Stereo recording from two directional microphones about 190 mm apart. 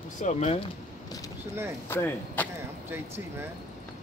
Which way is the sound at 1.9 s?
10° left (ahead or behind).